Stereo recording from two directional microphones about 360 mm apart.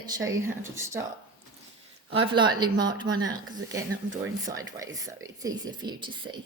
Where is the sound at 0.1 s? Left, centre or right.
Centre.